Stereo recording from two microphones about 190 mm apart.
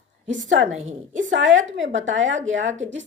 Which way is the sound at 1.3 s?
90° right.